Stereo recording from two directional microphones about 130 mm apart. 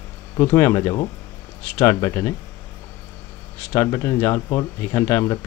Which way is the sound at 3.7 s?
20° left (ahead or behind).